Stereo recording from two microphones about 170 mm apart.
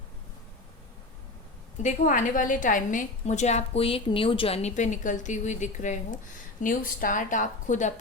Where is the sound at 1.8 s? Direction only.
50° left (ahead or behind).